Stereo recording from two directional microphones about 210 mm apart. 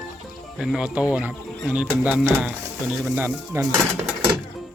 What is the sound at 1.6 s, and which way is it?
Speech, 5° right (ahead or behind).